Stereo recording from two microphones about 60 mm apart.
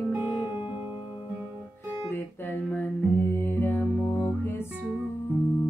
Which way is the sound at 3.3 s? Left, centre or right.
Left.